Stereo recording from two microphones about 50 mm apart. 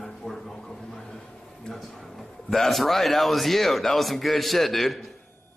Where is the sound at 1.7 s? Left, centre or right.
Centre.